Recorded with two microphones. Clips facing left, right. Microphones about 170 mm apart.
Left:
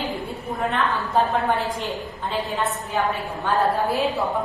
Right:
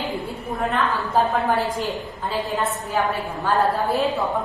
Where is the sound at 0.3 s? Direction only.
Centre (ahead or behind).